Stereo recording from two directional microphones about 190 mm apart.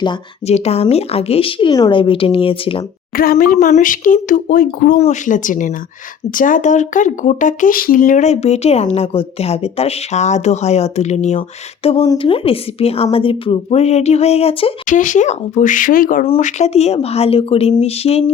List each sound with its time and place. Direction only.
0.0 s speech: 30° left (ahead or behind)
3.2 s speech: 50° left (ahead or behind)
16.2 s speech: 35° left (ahead or behind)